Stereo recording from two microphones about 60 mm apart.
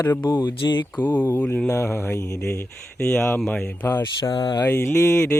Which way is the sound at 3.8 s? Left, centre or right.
Left.